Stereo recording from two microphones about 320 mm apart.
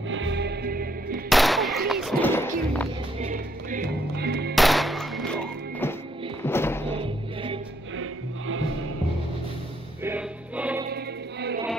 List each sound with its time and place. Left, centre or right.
0.1 s music: right
1.3 s music: centre
3.2 s music: right
4.6 s music: centre
7.0 s music: centre
8.0 s music: right
10.0 s music: centre